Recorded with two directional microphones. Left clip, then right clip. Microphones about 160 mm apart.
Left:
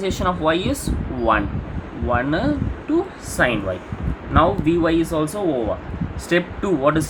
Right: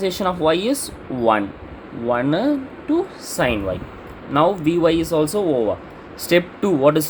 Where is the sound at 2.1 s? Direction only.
55° right (ahead or behind).